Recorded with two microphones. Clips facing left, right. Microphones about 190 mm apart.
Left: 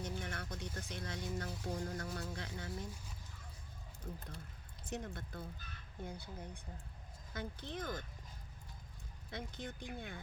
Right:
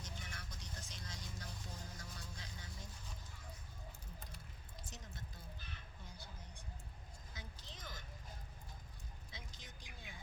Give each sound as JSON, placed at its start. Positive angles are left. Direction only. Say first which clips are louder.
{"t": 0.0, "sound": "vehicle", "louder": "left 10 dB", "side_deg": 60}
{"t": 4.9, "sound": "speech", "louder": "left 13 dB", "side_deg": 60}
{"t": 9.3, "sound": "speech", "louder": "left 15 dB", "side_deg": 60}